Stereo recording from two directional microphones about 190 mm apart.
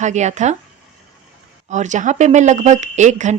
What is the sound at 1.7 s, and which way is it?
Speech, 40° right (ahead or behind).